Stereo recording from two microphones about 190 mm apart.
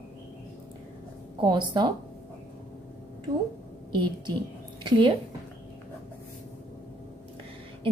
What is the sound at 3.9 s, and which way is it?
A woman's voice, 25° right (ahead or behind).